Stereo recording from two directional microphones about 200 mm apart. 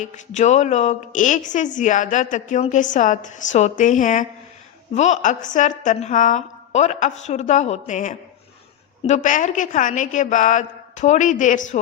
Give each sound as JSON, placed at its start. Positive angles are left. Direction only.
{"t": 0.0, "sound": "a woman's voice", "side_deg": 35}